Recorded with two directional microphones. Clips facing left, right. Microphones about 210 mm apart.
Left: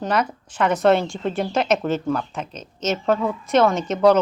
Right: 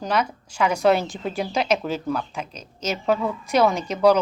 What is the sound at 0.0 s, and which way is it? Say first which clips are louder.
Speech: left 2 dB; 5° left (ahead or behind).